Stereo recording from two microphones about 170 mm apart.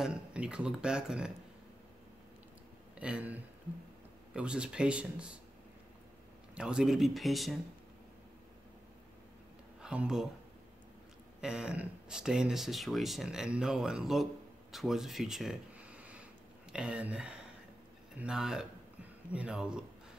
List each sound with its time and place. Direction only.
0.0 s speech: 5° right (ahead or behind)
3.0 s speech: 5° right (ahead or behind)
6.5 s speech: 5° right (ahead or behind)
9.8 s speech: 5° right (ahead or behind)
11.4 s speech: 5° right (ahead or behind)
14.7 s a sound: centre (ahead or behind)
16.7 s speech: 5° right (ahead or behind)